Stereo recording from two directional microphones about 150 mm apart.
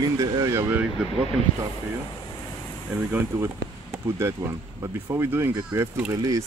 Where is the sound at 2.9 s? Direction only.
10° right (ahead or behind).